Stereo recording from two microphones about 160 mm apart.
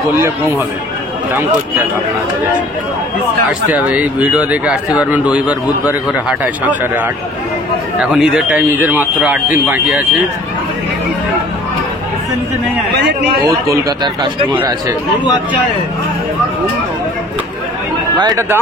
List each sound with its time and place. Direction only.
3.4 s speech: 10° right (ahead or behind)
13.7 s speech: 20° right (ahead or behind)
18.2 s speech: 20° right (ahead or behind)